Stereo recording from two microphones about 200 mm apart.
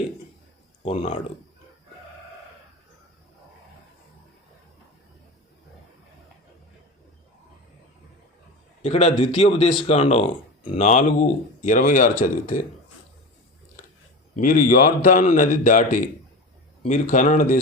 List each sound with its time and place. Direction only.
0.8 s speech: 30° left (ahead or behind)
8.8 s speech: 35° left (ahead or behind)
14.3 s speech: 45° left (ahead or behind)